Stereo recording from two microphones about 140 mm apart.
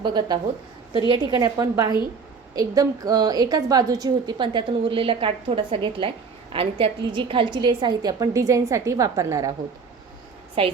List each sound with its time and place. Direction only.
0.0 s a woman's voice: 30° right (ahead or behind)
10.6 s a woman's voice: 40° right (ahead or behind)